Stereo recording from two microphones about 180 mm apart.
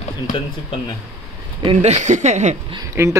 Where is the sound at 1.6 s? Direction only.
35° right (ahead or behind).